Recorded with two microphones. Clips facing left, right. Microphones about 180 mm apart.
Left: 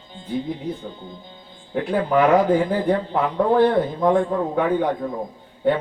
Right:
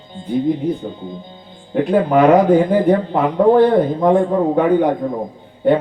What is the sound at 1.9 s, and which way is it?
A man's voice, 20° right (ahead or behind).